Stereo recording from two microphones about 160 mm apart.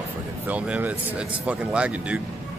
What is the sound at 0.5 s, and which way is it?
Speech, 10° right (ahead or behind).